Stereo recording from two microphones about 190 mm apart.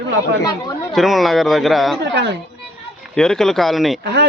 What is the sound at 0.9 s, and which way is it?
Speech, centre (ahead or behind).